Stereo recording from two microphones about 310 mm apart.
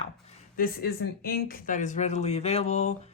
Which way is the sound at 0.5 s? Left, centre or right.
Left.